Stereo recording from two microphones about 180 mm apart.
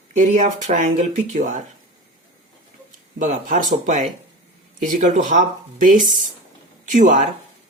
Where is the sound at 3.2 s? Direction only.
45° right (ahead or behind).